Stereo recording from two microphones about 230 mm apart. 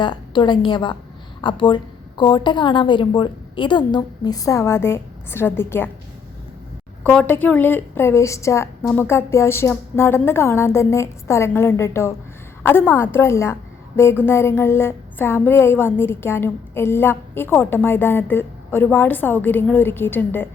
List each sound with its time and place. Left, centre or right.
0.0 s a woman's voice: centre
7.0 s a woman's voice: centre